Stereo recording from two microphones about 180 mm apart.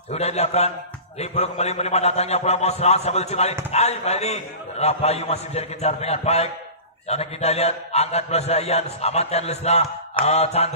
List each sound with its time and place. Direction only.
0.1 s a man's voice: 35° left (ahead or behind)